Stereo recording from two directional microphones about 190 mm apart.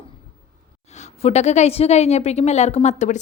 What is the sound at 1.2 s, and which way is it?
A woman's voice, 35° left (ahead or behind).